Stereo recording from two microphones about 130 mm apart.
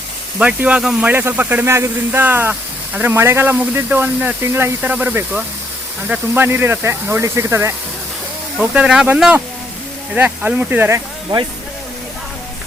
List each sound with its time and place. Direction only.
0.3 s speech: 10° right (ahead or behind)
8.5 s speech: 5° right (ahead or behind)